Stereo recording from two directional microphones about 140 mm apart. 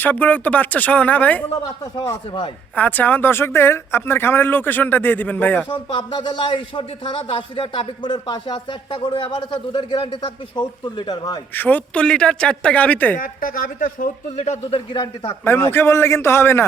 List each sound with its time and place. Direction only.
0.0 s speech: 10° left (ahead or behind)
1.8 s speech: 25° left (ahead or behind)
2.7 s speech: 10° left (ahead or behind)
5.6 s speech: 35° left (ahead or behind)
11.5 s speech: 15° left (ahead or behind)
13.1 s a man's voice: 80° left; by 14.8 s 55° left (ahead or behind)
15.4 s speech: 15° left (ahead or behind)